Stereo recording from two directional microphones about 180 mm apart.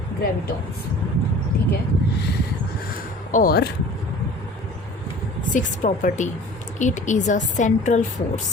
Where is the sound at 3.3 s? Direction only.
55° left (ahead or behind).